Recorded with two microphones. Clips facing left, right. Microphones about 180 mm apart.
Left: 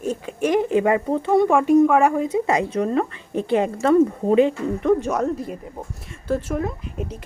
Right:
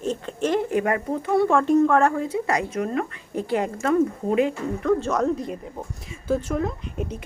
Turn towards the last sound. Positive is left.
turn(degrees=5)  # may be behind; listen again after turning